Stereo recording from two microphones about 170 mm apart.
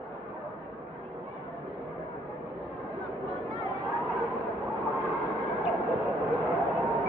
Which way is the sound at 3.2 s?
Centre (ahead or behind).